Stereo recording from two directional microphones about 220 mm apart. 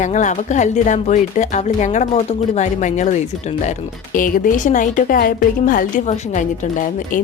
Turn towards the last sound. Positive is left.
turn(degrees=35)  # may be behind; listen again after turning